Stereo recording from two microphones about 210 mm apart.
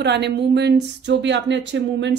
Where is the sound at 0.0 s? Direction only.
55° right (ahead or behind).